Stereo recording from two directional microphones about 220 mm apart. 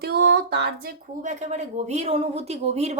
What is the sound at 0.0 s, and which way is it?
Speech, 50° right (ahead or behind).